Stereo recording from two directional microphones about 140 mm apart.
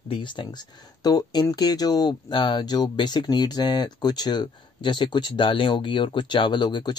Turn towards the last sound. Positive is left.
turn(degrees=30)  # may be behind; listen again after turning